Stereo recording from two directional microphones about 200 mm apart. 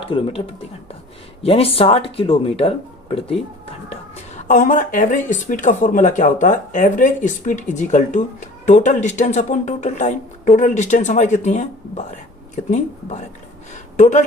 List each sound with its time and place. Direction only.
0.0 s speech: 25° left (ahead or behind)